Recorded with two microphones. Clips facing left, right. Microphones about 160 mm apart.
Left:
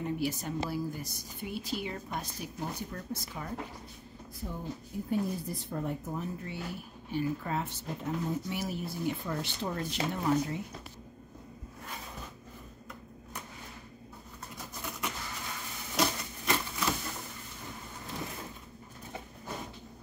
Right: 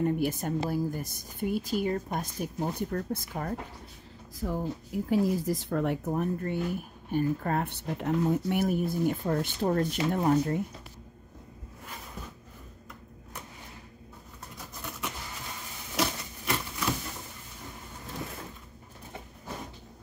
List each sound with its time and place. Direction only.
0.0 s speech: 50° right (ahead or behind)
4.4 s speech: 90° right; by 10.6 s 50° right (ahead or behind)
14.8 s a sound: centre (ahead or behind)